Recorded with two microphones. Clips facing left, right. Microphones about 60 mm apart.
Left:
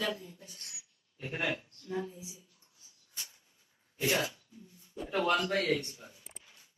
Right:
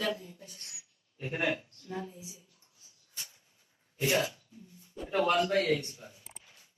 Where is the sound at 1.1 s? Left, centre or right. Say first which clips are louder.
Right 3 dB; centre.